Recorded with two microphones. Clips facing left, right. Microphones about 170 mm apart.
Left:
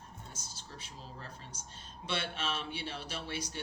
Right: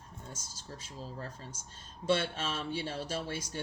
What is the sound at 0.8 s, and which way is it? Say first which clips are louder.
A woman's voice: right 7 dB; 45° right (ahead or behind).